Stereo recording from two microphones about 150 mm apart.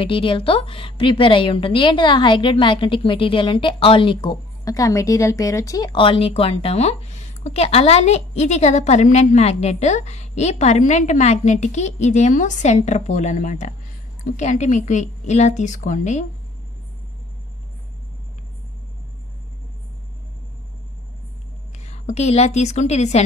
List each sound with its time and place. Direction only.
0.0 s a woman's voice: 35° left (ahead or behind); by 16.3 s 55° left (ahead or behind)
21.8 s a woman's voice: 50° left (ahead or behind)